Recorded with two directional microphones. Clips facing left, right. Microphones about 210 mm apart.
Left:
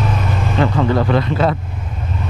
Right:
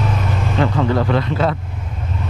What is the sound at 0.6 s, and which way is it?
Speech, 20° left (ahead or behind).